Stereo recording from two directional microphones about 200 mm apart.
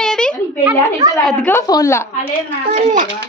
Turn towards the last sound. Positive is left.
turn(degrees=-40)  # may be behind; listen again after turning